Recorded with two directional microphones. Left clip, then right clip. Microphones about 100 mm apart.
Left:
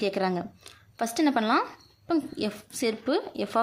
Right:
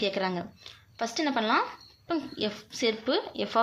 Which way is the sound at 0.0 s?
55° left (ahead or behind).